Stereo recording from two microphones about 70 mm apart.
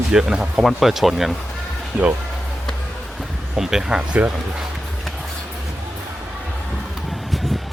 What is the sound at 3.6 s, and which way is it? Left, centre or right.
Speech, centre.